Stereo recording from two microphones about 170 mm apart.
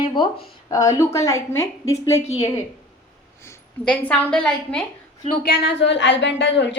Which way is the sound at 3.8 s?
5° left (ahead or behind).